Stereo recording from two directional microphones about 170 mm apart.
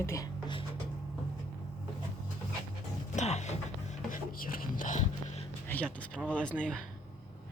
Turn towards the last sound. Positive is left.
turn(degrees=5)  # may be behind; listen again after turning